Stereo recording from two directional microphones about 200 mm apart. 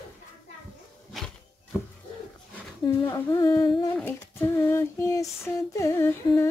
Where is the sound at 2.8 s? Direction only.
20° left (ahead or behind).